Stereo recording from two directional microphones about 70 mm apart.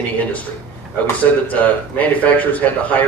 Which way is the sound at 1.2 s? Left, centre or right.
Left.